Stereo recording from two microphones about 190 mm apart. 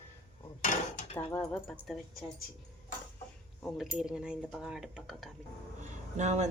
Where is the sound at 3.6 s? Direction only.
Centre (ahead or behind).